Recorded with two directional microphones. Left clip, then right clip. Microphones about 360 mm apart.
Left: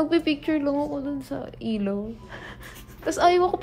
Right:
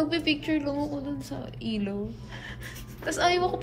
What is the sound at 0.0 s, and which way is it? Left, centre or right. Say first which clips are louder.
Speech: left 4 dB; left.